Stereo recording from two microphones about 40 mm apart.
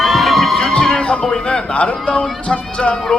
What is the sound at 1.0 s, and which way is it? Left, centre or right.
Speech, left.